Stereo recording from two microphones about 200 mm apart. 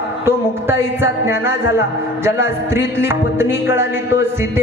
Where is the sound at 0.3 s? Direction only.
10° right (ahead or behind).